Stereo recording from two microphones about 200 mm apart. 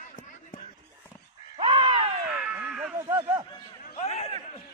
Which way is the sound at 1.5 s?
25° right (ahead or behind).